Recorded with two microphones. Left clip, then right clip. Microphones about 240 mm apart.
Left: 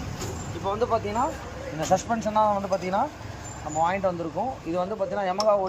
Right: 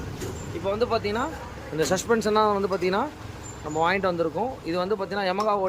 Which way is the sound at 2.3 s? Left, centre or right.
Centre.